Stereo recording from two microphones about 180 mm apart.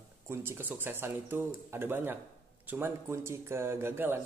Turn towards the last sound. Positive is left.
turn(degrees=-10)  # may be behind; listen again after turning